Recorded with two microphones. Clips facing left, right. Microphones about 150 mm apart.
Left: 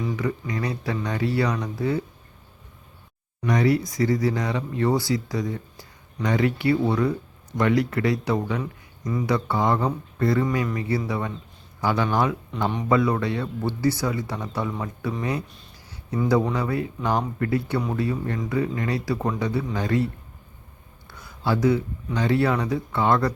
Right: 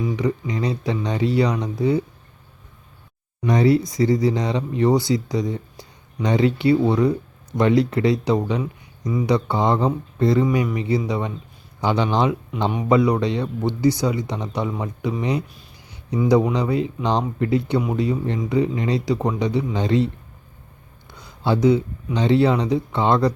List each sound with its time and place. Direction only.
0.0 s speech: 15° right (ahead or behind)
3.4 s speech: 25° right (ahead or behind)
21.1 s speech: 20° right (ahead or behind)